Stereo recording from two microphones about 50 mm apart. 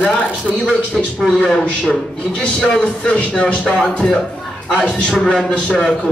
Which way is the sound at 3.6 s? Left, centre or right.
Centre.